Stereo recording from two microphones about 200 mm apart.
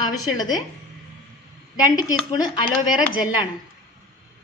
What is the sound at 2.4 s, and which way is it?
Speech, 20° left (ahead or behind).